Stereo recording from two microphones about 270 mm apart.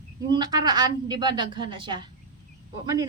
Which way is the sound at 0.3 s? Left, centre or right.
Centre.